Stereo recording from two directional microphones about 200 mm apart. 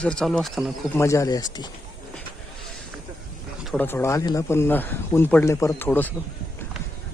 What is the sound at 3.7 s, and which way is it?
Speech, 10° left (ahead or behind).